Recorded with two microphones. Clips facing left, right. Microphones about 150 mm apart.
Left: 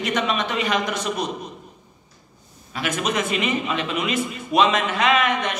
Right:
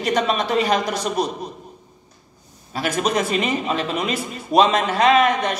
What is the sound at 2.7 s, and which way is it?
A man's voice, 35° right (ahead or behind).